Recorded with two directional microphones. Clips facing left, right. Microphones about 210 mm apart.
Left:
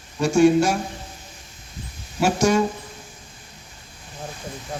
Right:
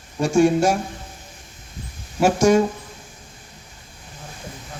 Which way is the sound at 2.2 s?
50° right (ahead or behind).